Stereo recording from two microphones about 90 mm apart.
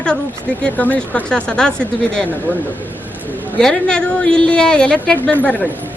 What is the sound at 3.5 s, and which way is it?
Speech, 10° left (ahead or behind).